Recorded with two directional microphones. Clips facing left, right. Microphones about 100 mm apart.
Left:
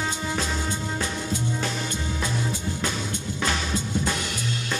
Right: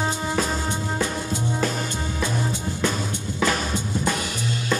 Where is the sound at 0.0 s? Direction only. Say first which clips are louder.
Right 4 dB; 35° right (ahead or behind).